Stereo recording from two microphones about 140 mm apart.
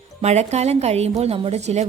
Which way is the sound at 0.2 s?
50° right (ahead or behind).